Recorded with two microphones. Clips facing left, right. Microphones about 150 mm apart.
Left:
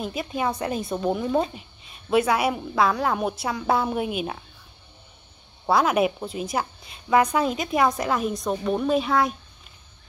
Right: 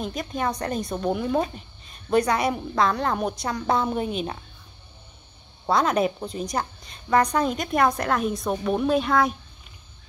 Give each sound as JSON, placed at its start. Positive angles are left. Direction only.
{"t": 0.0, "sound": "a woman's voice", "side_deg": 5}
{"t": 5.7, "sound": "a woman's voice", "side_deg": 5}